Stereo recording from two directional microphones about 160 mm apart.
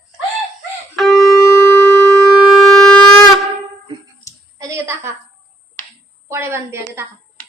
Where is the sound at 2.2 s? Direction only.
Centre (ahead or behind).